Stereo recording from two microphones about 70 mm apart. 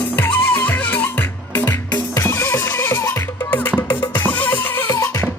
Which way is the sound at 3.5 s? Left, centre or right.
Left.